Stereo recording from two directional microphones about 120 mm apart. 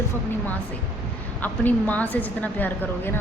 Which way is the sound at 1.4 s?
15° left (ahead or behind).